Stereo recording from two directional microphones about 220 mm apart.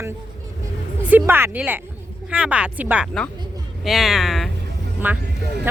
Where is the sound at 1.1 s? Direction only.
10° right (ahead or behind).